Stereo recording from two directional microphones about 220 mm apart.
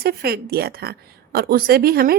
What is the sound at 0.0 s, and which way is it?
Speech, 45° right (ahead or behind).